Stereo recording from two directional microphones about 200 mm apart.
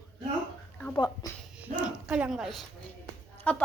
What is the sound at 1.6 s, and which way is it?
Speech, 5° right (ahead or behind).